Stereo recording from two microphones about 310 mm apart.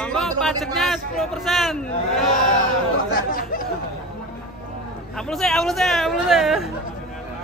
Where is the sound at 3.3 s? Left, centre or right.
Left.